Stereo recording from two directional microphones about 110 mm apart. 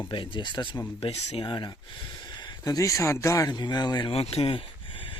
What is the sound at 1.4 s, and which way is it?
Speech, 45° left (ahead or behind).